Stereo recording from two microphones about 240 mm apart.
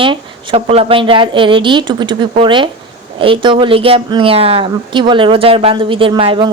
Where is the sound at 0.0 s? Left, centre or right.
Right.